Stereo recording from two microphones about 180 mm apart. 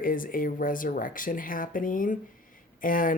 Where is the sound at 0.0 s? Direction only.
50° left (ahead or behind).